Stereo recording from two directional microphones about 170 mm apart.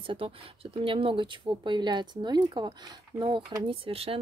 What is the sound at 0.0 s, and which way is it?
Speech, 30° right (ahead or behind).